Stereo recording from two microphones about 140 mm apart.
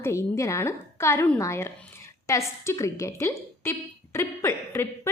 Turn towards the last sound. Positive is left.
turn(degrees=20)  # may be behind; listen again after turning